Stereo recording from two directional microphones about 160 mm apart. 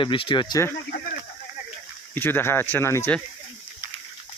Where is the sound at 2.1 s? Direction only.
10° left (ahead or behind).